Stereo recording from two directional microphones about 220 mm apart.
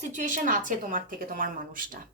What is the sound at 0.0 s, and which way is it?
A woman's voice, 35° right (ahead or behind).